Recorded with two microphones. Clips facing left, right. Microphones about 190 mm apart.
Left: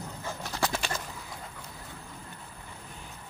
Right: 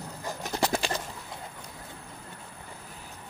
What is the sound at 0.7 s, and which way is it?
Bird, 35° right (ahead or behind).